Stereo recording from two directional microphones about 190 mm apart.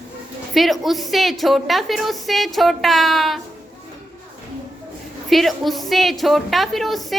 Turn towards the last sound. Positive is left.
turn(degrees=0)  # may be behind; listen again after turning